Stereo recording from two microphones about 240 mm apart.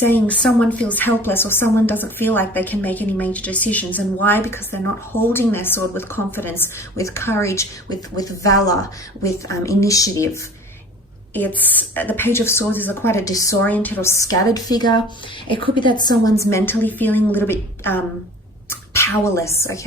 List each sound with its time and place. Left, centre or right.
0.0 s a woman's voice: centre